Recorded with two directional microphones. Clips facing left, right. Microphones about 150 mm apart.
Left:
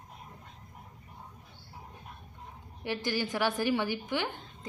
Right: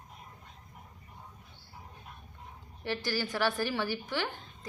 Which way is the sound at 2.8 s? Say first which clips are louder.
Left 1 dB; 15° left (ahead or behind).